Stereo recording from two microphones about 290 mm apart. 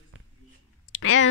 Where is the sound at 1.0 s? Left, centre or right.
Left.